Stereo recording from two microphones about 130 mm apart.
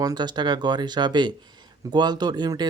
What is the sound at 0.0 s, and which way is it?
Speech, 30° right (ahead or behind).